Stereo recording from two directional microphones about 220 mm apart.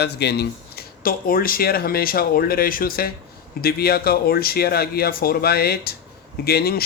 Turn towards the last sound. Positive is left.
turn(degrees=45)  # may be behind; listen again after turning